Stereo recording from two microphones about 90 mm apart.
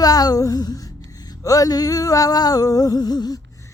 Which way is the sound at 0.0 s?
45° left (ahead or behind).